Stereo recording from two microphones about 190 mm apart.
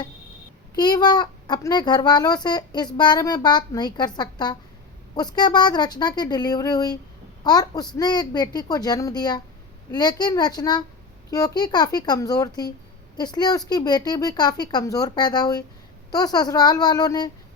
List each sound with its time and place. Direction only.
0.8 s a child's voice: 20° left (ahead or behind)